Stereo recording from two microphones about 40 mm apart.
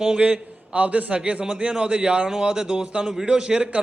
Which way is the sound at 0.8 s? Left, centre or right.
Right.